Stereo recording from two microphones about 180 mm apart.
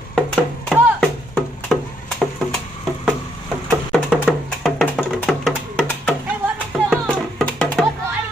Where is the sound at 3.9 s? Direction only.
Centre (ahead or behind).